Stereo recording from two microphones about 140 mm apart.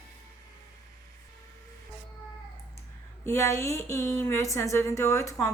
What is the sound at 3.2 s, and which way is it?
A woman's voice, 20° left (ahead or behind).